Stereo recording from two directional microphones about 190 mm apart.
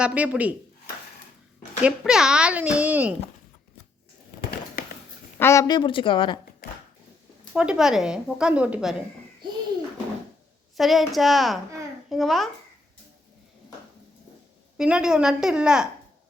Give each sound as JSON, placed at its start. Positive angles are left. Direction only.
{"t": 0.0, "sound": "speech", "side_deg": -5}
{"t": 1.8, "sound": "speech", "side_deg": -5}
{"t": 5.4, "sound": "speech", "side_deg": 15}
{"t": 7.5, "sound": "a woman's voice", "side_deg": -5}
{"t": 10.8, "sound": "a woman's voice", "side_deg": 0}
{"t": 14.8, "sound": "a woman's voice", "side_deg": -5}